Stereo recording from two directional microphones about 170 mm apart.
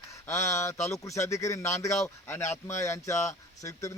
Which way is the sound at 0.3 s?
15° left (ahead or behind).